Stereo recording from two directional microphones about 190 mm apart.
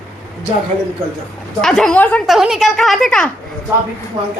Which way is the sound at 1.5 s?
5° left (ahead or behind).